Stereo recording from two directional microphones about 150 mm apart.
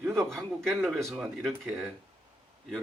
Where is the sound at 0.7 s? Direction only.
Centre (ahead or behind).